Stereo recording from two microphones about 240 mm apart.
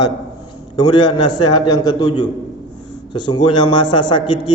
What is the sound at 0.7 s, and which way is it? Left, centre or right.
A man's voice, centre.